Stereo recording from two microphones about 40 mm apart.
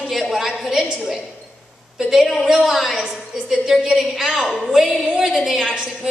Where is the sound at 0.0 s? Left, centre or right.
Centre.